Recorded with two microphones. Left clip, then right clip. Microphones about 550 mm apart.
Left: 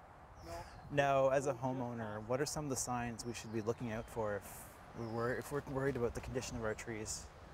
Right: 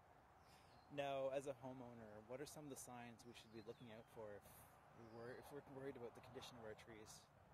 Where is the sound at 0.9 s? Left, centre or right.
Left.